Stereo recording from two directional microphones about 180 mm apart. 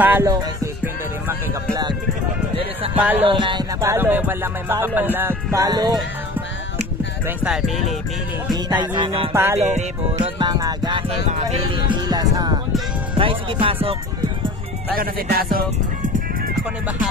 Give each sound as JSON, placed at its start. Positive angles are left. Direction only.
{"t": 0.0, "sound": "music", "side_deg": -10}
{"t": 3.0, "sound": "music", "side_deg": -10}
{"t": 3.3, "sound": "music", "side_deg": -25}
{"t": 7.2, "sound": "speech", "side_deg": -5}
{"t": 8.9, "sound": "music", "side_deg": -30}
{"t": 9.3, "sound": "music", "side_deg": -10}
{"t": 9.6, "sound": "music", "side_deg": -40}
{"t": 10.4, "sound": "music", "side_deg": -20}
{"t": 11.2, "sound": "music", "side_deg": -35}
{"t": 11.9, "sound": "music", "side_deg": -20}
{"t": 15.0, "sound": "speech", "side_deg": -55}